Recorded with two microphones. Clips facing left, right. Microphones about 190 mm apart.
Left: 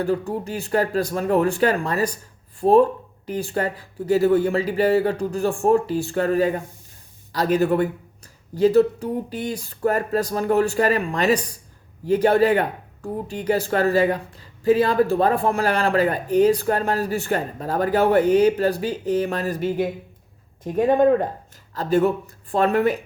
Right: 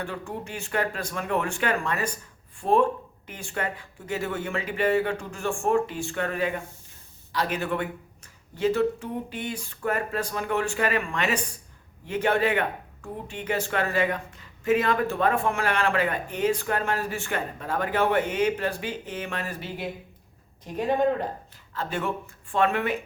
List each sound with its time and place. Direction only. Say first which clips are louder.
0.0 s speech: left 10 dB; 35° left (ahead or behind)
21.8 s speech: left 10 dB; 40° left (ahead or behind)